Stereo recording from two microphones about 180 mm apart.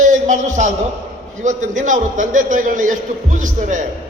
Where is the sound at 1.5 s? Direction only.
45° right (ahead or behind).